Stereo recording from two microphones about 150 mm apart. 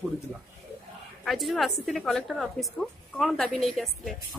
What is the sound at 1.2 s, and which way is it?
A woman's voice, centre (ahead or behind).